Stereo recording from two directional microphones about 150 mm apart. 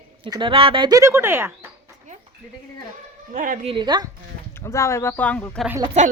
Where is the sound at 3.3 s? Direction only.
60° right (ahead or behind).